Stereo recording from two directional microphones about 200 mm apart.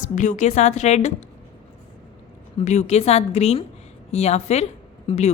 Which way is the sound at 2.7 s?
35° left (ahead or behind).